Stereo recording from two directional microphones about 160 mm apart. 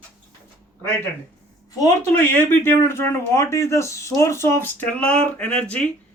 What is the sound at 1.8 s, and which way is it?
Speech, 15° left (ahead or behind).